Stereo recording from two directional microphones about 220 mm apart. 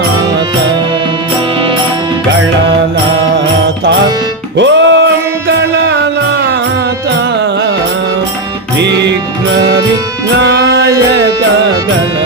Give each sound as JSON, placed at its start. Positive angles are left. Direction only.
{"t": 4.5, "sound": "music", "side_deg": -55}
{"t": 10.4, "sound": "music", "side_deg": -50}